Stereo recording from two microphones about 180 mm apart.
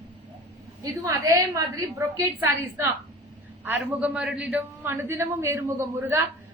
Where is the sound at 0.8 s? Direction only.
20° right (ahead or behind).